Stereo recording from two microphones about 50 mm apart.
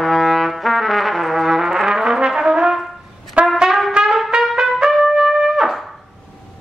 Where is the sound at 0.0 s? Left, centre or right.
Centre.